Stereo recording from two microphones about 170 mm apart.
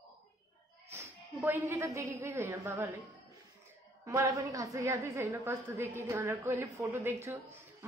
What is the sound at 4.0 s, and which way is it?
A woman's voice, 20° right (ahead or behind).